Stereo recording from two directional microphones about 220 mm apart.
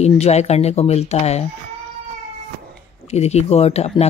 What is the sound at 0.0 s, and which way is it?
Speech, 30° left (ahead or behind).